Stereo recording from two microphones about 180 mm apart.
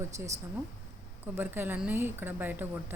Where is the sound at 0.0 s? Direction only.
15° right (ahead or behind).